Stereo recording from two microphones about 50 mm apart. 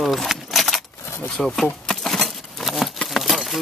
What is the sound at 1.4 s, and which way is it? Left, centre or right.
Speech, centre.